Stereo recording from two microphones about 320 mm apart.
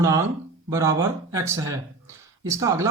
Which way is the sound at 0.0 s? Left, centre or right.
Centre.